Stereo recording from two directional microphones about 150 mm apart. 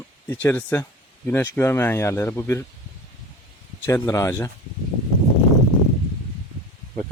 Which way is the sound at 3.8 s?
20° left (ahead or behind).